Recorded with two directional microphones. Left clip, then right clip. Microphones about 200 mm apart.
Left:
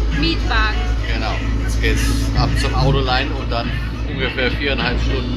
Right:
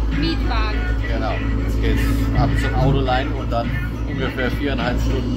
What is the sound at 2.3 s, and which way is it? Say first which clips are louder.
Speech: left 1 dB; 15° right (ahead or behind).